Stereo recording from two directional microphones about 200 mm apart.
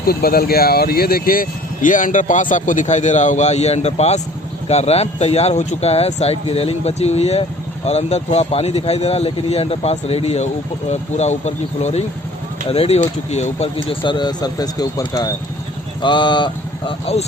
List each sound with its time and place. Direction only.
0.0 s a man's voice: 50° left (ahead or behind); by 17.2 s 25° left (ahead or behind)